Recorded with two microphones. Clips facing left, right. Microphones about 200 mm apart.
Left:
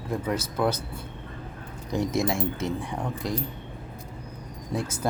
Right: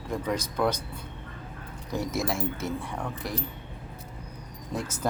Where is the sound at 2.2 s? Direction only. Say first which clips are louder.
Left 3 dB; 20° left (ahead or behind).